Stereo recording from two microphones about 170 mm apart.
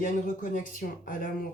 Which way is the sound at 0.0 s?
50° left (ahead or behind).